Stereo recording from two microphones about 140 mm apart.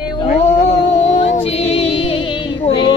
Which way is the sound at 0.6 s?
50° left (ahead or behind).